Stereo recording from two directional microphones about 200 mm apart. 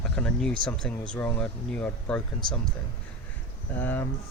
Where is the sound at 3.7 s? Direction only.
10° left (ahead or behind).